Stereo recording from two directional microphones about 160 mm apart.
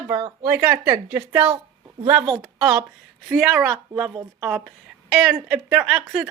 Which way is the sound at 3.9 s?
25° right (ahead or behind).